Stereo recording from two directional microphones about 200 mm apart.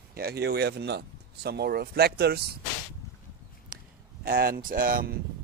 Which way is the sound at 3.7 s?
45° right (ahead or behind).